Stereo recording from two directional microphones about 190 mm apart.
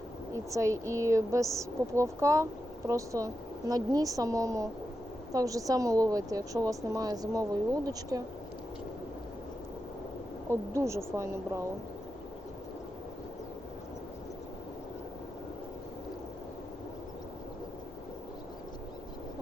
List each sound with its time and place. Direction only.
0.5 s speech: 15° right (ahead or behind)
10.5 s speech: 15° right (ahead or behind)